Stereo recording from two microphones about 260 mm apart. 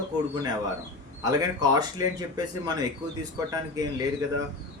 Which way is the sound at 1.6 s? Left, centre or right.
Centre.